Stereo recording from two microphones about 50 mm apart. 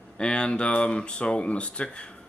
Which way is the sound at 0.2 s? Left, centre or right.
Centre.